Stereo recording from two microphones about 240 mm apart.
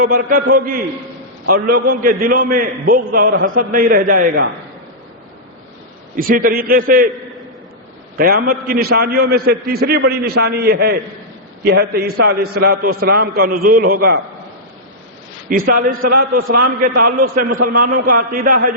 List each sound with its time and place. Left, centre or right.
0.0 s a man's voice: right
6.1 s a man's voice: right
8.2 s a man's voice: right
15.4 s a man's voice: right